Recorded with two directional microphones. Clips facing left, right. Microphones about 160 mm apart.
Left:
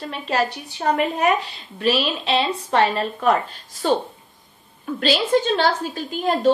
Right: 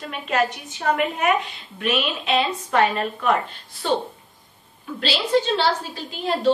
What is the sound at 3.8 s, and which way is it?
A woman's voice, 45° left (ahead or behind).